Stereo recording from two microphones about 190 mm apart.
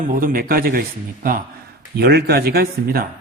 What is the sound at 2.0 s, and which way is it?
Speech, 55° right (ahead or behind).